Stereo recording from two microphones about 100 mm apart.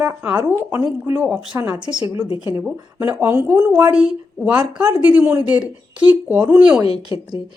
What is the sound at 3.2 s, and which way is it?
Speech, 25° right (ahead or behind).